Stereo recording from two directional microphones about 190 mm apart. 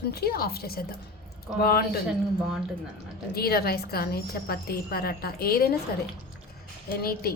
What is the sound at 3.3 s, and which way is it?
A woman's voice, 55° left (ahead or behind).